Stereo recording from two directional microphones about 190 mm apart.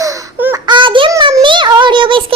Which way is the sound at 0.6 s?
25° right (ahead or behind).